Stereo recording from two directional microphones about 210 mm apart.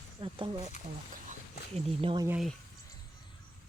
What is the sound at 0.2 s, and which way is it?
Speech, 25° right (ahead or behind).